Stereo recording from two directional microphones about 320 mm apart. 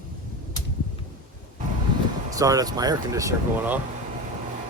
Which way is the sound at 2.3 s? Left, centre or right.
Centre.